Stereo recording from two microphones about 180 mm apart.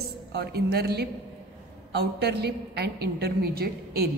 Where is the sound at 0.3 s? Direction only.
60° right (ahead or behind).